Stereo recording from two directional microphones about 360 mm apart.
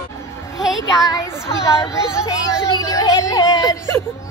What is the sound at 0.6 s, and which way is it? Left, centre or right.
Music, centre.